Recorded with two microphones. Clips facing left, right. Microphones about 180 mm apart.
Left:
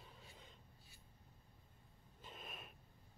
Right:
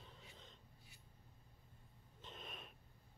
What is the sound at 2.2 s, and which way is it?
Snort, 5° left (ahead or behind).